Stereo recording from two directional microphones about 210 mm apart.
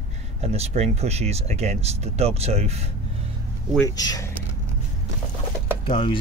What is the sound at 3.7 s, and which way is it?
Speech, 15° left (ahead or behind).